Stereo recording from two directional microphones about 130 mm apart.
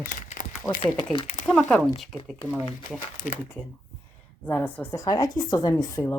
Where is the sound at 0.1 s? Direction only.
90° left.